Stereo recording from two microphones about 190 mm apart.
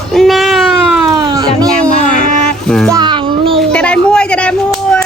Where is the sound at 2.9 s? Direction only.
25° right (ahead or behind).